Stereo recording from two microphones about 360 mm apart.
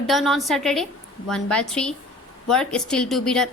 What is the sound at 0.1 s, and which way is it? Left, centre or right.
A woman's voice, centre.